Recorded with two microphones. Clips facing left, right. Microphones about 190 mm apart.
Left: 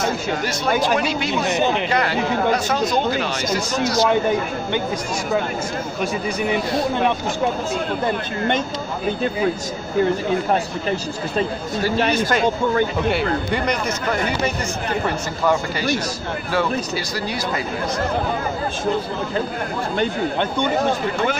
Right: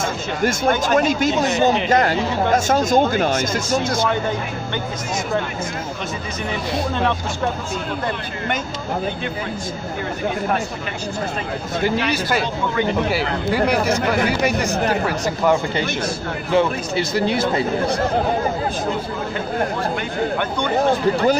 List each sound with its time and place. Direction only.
0.4 s speech: 50° right (ahead or behind)
13.5 s speech: 5° right (ahead or behind)
16.5 s speech: 25° right (ahead or behind)